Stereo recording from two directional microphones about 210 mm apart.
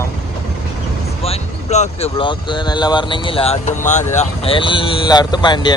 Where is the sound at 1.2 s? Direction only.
30° left (ahead or behind).